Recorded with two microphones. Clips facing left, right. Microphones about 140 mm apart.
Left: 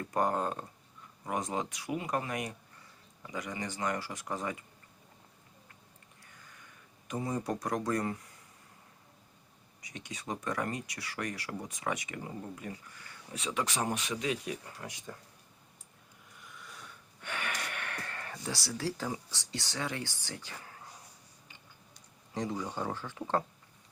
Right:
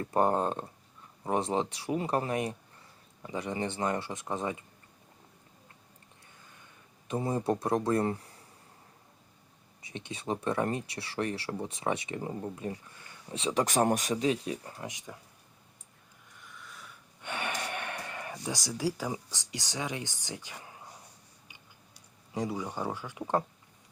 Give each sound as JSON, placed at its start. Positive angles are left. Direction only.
{"t": 0.0, "sound": "speech", "side_deg": -30}
{"t": 7.1, "sound": "speech", "side_deg": -30}
{"t": 9.8, "sound": "speech", "side_deg": -25}
{"t": 14.8, "sound": "speech", "side_deg": -15}
{"t": 16.4, "sound": "a sound", "side_deg": 0}
{"t": 17.2, "sound": "speech", "side_deg": -25}
{"t": 21.9, "sound": "speech", "side_deg": -10}